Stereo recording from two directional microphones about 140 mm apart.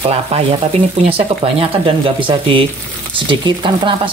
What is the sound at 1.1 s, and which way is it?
Speech, 40° right (ahead or behind).